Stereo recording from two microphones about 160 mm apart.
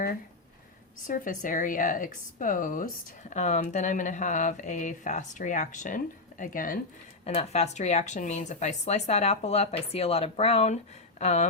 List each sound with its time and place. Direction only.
1.0 s speech: 55° left (ahead or behind)
7.3 s speech: 40° left (ahead or behind)